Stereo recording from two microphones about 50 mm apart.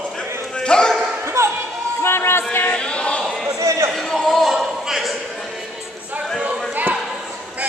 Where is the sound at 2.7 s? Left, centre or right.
Left.